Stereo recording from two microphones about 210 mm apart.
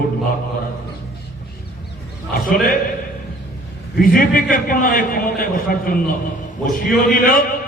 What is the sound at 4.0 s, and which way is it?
A man's voice, 40° left (ahead or behind).